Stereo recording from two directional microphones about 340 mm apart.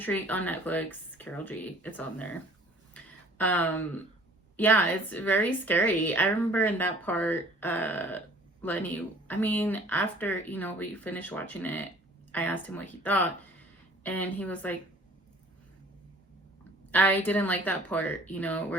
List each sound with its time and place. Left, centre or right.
0.0 s a woman's voice: centre
2.9 s a sound: centre
4.5 s a woman's voice: centre
16.9 s a woman's voice: centre